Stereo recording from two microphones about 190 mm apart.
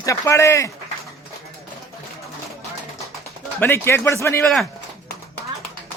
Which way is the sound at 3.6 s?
10° left (ahead or behind).